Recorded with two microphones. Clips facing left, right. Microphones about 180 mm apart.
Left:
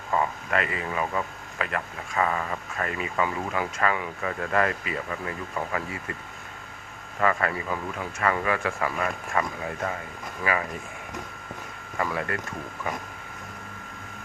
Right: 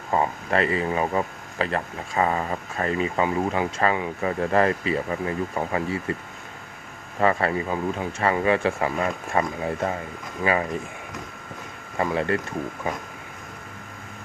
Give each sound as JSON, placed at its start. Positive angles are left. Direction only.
{"t": 0.1, "sound": "speech", "side_deg": -30}
{"t": 7.2, "sound": "speech", "side_deg": -30}
{"t": 11.9, "sound": "speech", "side_deg": -30}